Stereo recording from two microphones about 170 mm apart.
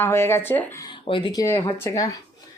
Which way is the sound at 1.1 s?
30° left (ahead or behind).